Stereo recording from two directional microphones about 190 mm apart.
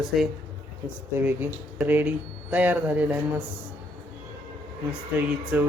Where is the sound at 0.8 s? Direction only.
10° right (ahead or behind).